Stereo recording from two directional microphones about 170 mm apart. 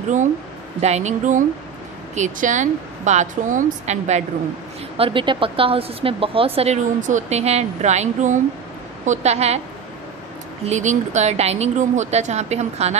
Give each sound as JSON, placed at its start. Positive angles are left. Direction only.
{"t": 0.7, "sound": "a woman's voice", "side_deg": -40}
{"t": 4.9, "sound": "speech", "side_deg": -30}
{"t": 10.6, "sound": "speech", "side_deg": -45}